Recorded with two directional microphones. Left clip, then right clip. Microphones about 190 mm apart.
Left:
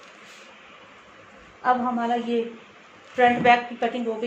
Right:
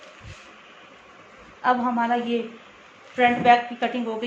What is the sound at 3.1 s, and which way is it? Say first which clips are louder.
Speech: even; 20° left (ahead or behind).